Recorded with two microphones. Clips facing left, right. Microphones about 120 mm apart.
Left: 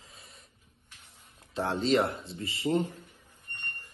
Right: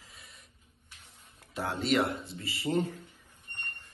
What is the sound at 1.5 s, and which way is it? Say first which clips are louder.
Speech: left 3 dB; 30° left (ahead or behind).